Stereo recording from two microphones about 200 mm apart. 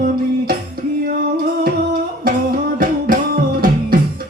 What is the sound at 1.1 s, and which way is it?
Music, 45° right (ahead or behind).